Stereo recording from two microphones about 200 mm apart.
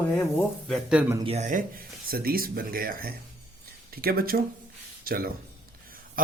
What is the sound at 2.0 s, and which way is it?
A man's voice, 45° right (ahead or behind).